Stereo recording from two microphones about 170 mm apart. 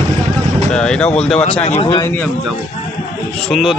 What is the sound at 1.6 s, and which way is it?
Speech, 40° left (ahead or behind).